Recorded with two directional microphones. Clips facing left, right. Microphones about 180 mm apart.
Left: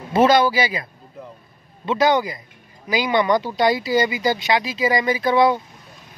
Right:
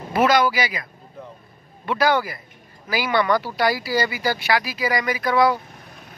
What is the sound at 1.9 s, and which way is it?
Speech, 20° left (ahead or behind).